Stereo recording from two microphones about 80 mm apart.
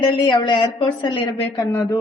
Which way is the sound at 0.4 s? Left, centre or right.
Left.